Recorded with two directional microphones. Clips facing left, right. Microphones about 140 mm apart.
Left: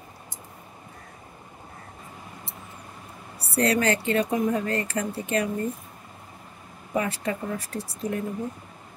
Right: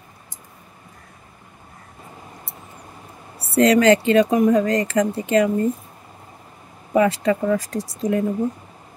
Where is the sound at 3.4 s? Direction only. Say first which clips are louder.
Right 8 dB; 90° right.